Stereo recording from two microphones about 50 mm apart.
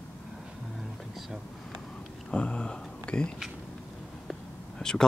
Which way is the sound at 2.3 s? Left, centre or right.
Left.